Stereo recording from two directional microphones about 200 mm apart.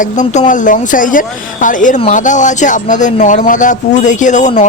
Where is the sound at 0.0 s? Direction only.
40° left (ahead or behind).